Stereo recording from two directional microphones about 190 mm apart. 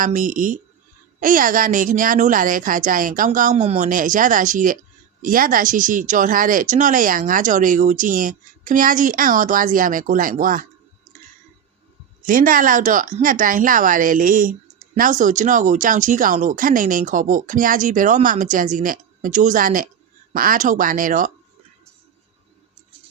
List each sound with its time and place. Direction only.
0.0 s speech: 45° right (ahead or behind)
12.2 s speech: 45° right (ahead or behind)